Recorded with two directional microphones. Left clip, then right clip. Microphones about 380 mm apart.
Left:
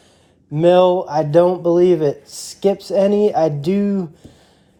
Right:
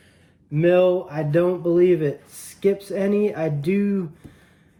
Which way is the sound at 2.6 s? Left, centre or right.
Left.